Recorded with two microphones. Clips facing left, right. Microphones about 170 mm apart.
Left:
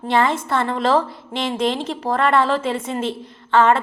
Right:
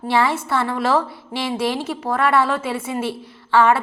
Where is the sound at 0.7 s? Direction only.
20° left (ahead or behind).